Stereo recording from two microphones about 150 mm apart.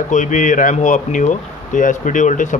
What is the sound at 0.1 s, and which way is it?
Speech, 60° left (ahead or behind).